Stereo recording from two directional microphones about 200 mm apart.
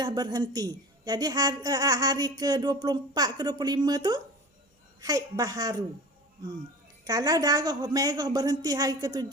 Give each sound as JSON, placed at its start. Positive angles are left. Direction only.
{"t": 0.0, "sound": "a woman's voice", "side_deg": -20}
{"t": 7.0, "sound": "a woman's voice", "side_deg": -20}